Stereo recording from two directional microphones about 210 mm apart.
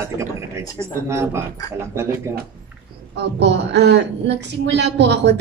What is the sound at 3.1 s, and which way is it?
A woman's voice, 55° right (ahead or behind).